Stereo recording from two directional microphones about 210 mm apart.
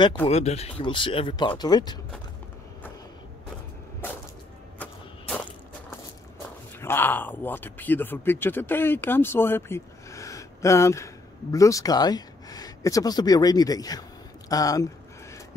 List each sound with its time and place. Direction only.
0.3 s speech: 30° left (ahead or behind)
6.8 s speech: 10° left (ahead or behind)